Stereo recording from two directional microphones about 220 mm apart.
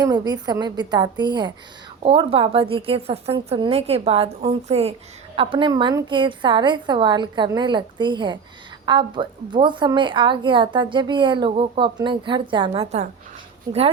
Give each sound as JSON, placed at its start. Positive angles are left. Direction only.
{"t": 0.0, "sound": "a woman's voice", "side_deg": -20}